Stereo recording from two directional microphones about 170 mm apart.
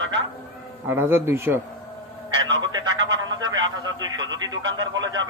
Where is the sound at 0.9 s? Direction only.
15° right (ahead or behind).